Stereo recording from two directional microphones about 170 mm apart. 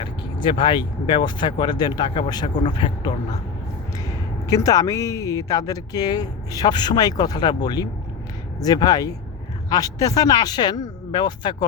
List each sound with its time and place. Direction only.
0.0 s speech: 30° left (ahead or behind)
4.4 s speech: 20° left (ahead or behind)